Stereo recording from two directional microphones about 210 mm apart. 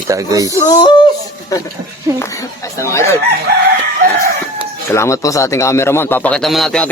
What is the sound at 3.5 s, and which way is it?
Chicken, 45° right (ahead or behind).